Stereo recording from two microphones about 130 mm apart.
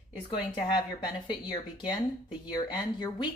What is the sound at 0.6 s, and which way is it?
A woman's voice, 35° left (ahead or behind).